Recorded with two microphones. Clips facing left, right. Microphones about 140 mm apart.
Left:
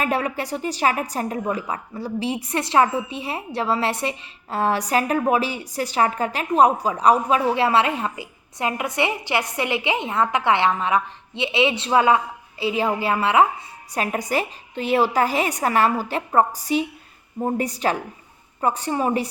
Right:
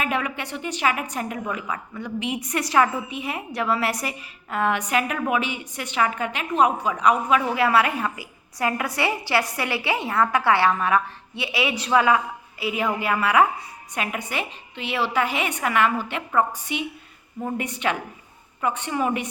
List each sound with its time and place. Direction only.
0.0 s a woman's voice: 35° left (ahead or behind)
13.9 s a woman's voice: 35° left (ahead or behind)